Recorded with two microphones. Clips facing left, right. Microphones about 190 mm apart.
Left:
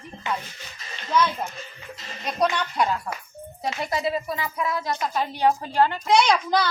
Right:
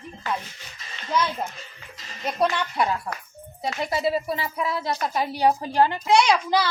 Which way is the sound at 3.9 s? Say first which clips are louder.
Right 3 dB; 30° right (ahead or behind).